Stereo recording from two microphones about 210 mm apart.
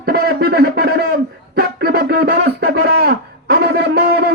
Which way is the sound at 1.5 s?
50° right (ahead or behind).